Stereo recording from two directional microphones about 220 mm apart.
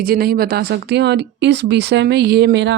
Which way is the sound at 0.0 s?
45° right (ahead or behind).